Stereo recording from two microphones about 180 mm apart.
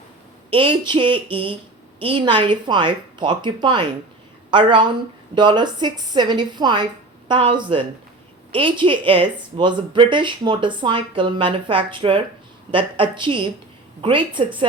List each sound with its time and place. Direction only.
0.5 s speech: 30° right (ahead or behind)